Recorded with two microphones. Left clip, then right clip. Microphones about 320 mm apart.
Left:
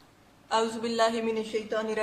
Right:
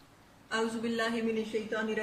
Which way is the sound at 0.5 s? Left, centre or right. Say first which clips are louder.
Left 5 dB; centre.